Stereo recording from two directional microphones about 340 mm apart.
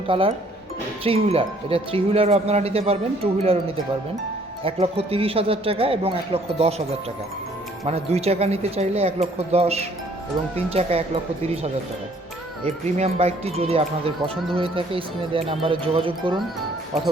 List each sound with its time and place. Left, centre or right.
0.1 s speech: centre
4.6 s speech: centre
7.9 s speech: centre